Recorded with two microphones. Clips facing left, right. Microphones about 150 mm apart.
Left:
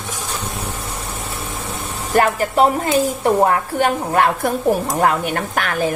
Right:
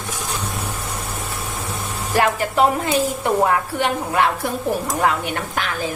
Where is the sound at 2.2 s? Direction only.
40° left (ahead or behind).